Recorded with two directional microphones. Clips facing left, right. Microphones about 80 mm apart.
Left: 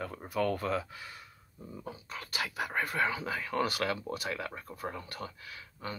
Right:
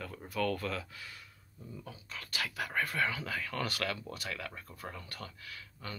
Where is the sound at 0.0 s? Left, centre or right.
Left.